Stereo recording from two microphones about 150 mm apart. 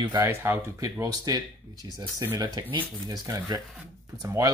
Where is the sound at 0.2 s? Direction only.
15° right (ahead or behind).